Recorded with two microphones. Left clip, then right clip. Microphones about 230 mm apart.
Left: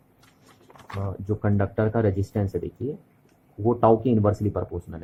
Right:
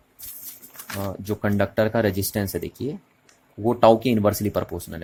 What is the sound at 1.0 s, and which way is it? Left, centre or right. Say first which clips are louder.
Speech: right 2 dB; right.